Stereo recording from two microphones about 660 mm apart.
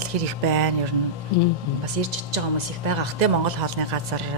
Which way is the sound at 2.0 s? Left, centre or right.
Right.